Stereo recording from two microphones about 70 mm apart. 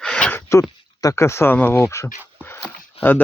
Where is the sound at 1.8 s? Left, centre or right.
Left.